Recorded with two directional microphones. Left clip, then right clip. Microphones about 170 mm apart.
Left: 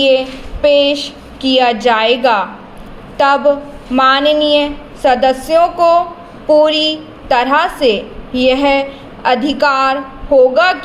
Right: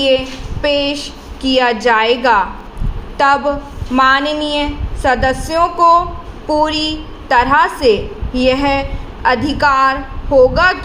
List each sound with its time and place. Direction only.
0.1 s a woman's voice: 20° right (ahead or behind)